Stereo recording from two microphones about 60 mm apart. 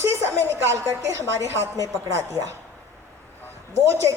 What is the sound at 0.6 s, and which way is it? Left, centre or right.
Speech, right.